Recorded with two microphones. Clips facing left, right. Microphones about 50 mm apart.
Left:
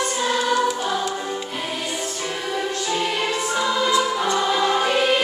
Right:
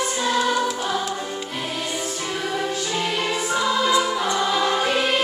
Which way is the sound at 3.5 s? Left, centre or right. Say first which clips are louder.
Right 1 dB; centre.